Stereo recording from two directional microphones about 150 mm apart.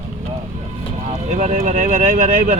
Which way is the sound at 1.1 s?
50° right (ahead or behind).